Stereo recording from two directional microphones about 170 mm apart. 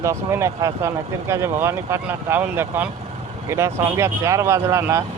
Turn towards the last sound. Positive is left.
turn(degrees=-15)  # may be behind; listen again after turning